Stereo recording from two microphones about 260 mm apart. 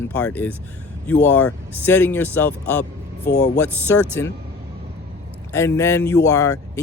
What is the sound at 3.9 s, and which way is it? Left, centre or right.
Speech, centre.